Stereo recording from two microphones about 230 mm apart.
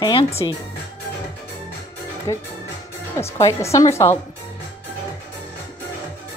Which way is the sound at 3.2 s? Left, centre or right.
Centre.